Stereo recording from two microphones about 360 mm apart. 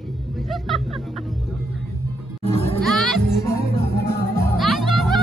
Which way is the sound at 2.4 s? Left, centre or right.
Centre.